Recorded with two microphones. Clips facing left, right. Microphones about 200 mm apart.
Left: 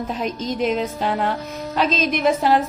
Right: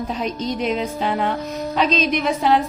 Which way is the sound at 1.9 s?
50° left (ahead or behind).